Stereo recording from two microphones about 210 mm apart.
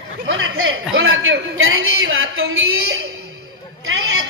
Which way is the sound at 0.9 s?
75° right (ahead or behind).